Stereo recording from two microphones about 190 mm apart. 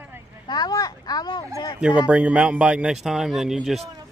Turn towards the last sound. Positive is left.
turn(degrees=0)  # may be behind; listen again after turning